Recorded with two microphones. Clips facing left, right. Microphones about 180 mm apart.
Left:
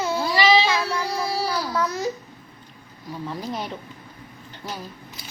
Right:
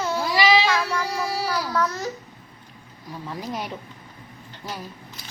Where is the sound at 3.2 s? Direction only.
5° right (ahead or behind).